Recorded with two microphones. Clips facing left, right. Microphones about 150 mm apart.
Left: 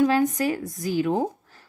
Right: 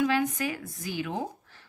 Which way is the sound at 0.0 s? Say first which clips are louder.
Left 6 dB; 40° left (ahead or behind).